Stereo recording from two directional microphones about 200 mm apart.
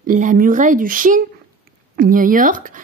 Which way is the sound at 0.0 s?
40° right (ahead or behind).